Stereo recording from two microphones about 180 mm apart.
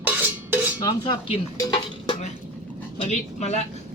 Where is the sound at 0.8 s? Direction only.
25° left (ahead or behind).